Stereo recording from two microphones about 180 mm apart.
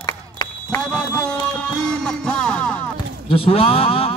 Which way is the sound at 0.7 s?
5° left (ahead or behind).